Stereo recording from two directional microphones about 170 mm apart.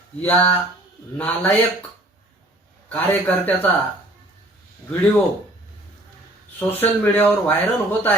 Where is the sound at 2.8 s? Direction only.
10° left (ahead or behind).